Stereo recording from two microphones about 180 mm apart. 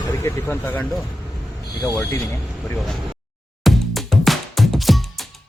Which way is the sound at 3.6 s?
Centre (ahead or behind).